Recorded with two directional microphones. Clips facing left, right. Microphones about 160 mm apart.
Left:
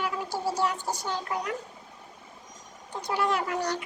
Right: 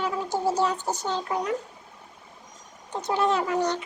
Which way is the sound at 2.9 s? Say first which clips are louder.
Right 4 dB; 20° right (ahead or behind).